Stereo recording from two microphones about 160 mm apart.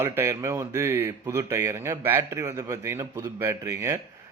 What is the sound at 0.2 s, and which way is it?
Speech, 15° right (ahead or behind).